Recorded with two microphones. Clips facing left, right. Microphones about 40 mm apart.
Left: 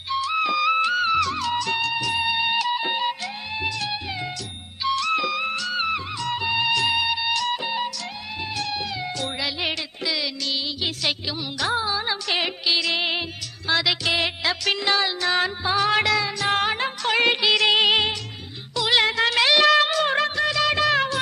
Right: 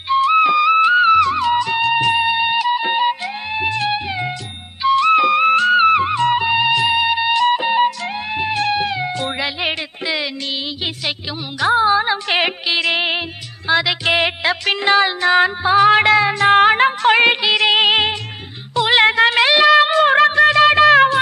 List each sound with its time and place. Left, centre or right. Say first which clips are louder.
0.1 s music: right 10 dB; right
1.8 s music: right 9 dB; right
2.2 s music: right 6 dB; centre
6.7 s music: right 6 dB; centre; by 9.0 s right
9.0 s meow: right 6 dB; right
11.8 s music: right 10 dB; right
13.7 s music: right 5 dB; centre
14.0 s music: right 7 dB; right
17.4 s music: right 4 dB; right
18.8 s music of bollywood: right 7 dB; right
19.6 s music: right 7 dB; centre
19.9 s music: right 9 dB; right